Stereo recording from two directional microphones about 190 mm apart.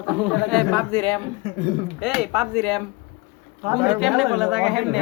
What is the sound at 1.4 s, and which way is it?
Speech, 35° left (ahead or behind).